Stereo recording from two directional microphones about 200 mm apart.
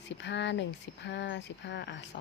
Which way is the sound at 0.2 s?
60° left (ahead or behind).